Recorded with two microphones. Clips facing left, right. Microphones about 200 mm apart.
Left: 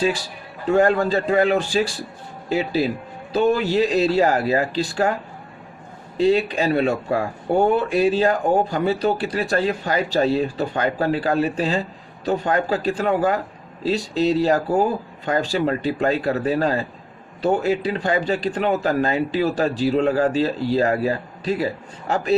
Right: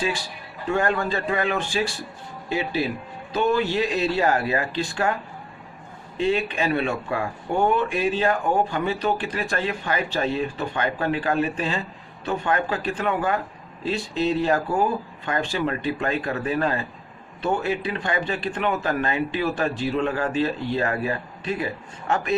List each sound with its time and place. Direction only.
0.7 s speech: 40° left (ahead or behind)
6.1 s speech: 35° left (ahead or behind)